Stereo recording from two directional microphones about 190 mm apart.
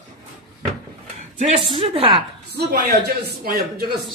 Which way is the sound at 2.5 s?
55° right (ahead or behind).